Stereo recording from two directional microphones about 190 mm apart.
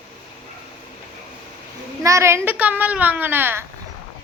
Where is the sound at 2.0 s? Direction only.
15° right (ahead or behind).